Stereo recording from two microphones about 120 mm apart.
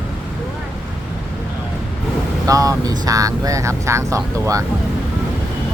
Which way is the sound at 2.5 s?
30° right (ahead or behind).